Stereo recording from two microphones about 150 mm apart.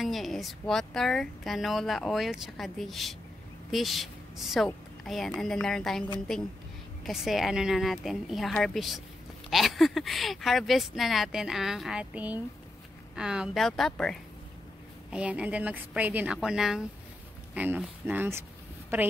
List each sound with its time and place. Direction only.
0.0 s a woman's voice: centre (ahead or behind)
7.1 s a woman's voice: centre (ahead or behind)
15.0 s a woman's voice: 5° right (ahead or behind)